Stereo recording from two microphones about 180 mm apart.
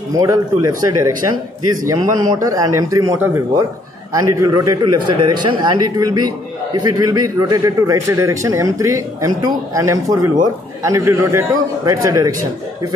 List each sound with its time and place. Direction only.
0.1 s a man's voice: 20° right (ahead or behind)